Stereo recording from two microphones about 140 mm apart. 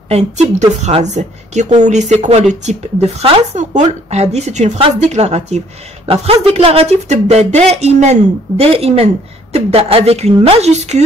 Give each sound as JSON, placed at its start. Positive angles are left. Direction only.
{"t": 0.1, "sound": "speech", "side_deg": -55}